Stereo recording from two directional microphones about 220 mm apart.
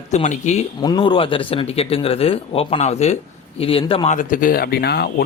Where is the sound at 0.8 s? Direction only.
20° left (ahead or behind).